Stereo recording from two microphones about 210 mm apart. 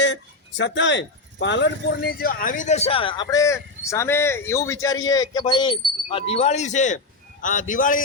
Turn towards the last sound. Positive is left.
turn(degrees=40)  # may be behind; listen again after turning